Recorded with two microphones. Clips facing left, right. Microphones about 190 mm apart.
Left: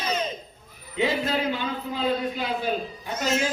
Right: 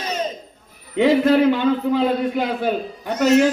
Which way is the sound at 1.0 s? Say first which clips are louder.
Right 10 dB; 65° right (ahead or behind).